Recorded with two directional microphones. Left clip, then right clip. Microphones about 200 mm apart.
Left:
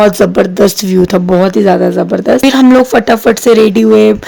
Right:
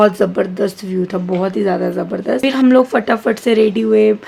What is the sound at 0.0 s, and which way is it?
Speech, 45° left (ahead or behind).